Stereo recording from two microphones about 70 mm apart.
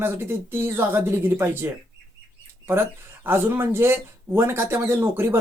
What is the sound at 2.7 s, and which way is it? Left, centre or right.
Speech, right.